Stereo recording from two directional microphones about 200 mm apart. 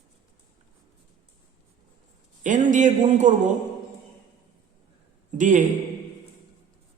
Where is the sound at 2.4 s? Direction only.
40° right (ahead or behind).